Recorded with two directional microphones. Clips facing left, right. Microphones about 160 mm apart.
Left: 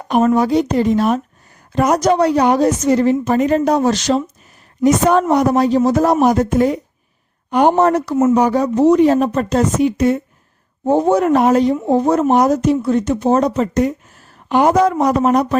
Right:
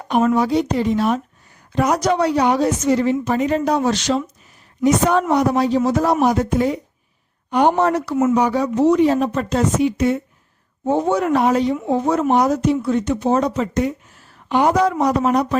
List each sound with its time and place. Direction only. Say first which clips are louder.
0.1 s speech: left 3 dB; 45° left (ahead or behind)